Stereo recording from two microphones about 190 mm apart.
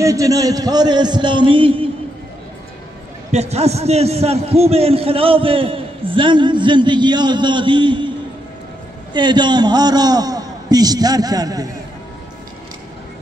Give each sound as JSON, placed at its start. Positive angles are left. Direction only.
{"t": 0.0, "sound": "a man's voice", "side_deg": -15}
{"t": 3.3, "sound": "a man's voice", "side_deg": -35}
{"t": 9.1, "sound": "a man's voice", "side_deg": -25}